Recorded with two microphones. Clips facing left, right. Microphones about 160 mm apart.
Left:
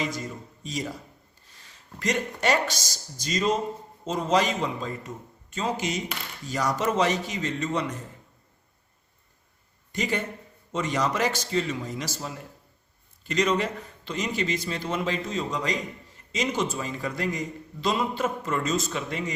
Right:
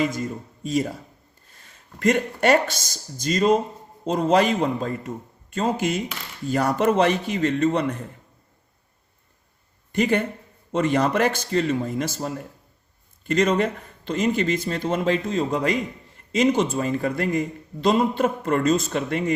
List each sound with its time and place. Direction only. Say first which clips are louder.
0.0 s a man's voice: right 6 dB; 50° right (ahead or behind)
9.9 s a man's voice: right 7 dB; 55° right (ahead or behind)